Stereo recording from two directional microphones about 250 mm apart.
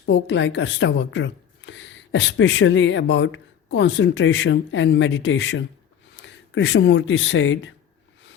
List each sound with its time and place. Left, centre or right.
0.0 s speech: left